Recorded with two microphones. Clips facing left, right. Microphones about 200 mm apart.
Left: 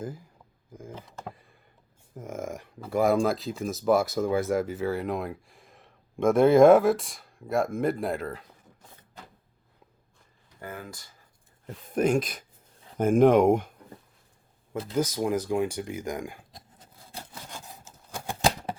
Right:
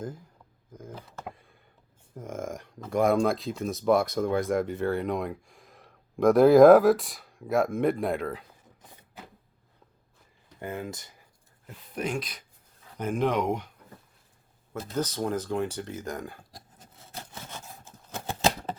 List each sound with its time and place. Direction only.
0.7 s speech: 10° left (ahead or behind)
1.2 s a sound: centre (ahead or behind)
2.1 s speech: 5° left (ahead or behind)
10.6 s speech: 25° right (ahead or behind)
11.6 s speech: 45° left (ahead or behind)
14.9 s speech: 10° left (ahead or behind)
18.1 s a sound: 10° left (ahead or behind)